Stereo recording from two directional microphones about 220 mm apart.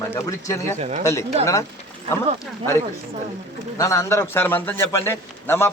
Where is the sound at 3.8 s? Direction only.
15° left (ahead or behind).